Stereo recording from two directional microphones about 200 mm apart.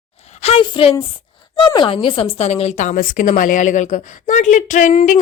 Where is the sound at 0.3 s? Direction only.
30° left (ahead or behind).